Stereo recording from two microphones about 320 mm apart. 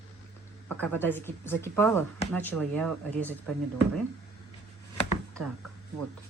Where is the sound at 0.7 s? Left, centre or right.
Centre.